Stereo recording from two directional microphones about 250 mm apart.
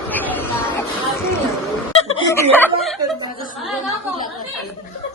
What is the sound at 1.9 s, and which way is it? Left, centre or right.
Snicker, left.